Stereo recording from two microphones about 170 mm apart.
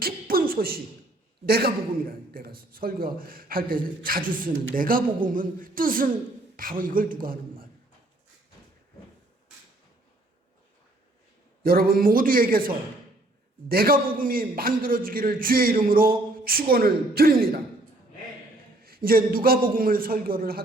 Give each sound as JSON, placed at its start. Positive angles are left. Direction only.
{"t": 0.0, "sound": "a sound", "side_deg": -60}
{"t": 1.5, "sound": "a man's voice", "side_deg": -65}
{"t": 11.6, "sound": "a man's voice", "side_deg": -60}
{"t": 18.8, "sound": "a man's voice", "side_deg": -60}